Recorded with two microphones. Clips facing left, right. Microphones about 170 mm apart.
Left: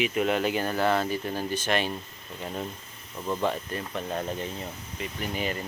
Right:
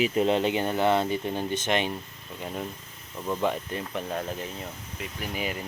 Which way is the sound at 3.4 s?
15° right (ahead or behind).